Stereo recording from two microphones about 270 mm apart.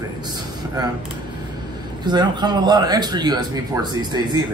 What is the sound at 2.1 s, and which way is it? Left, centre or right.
A man's voice, centre.